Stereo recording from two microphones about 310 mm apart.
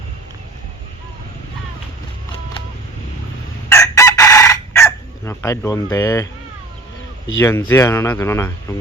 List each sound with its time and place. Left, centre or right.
3.7 s chicken: centre
7.3 s speech: centre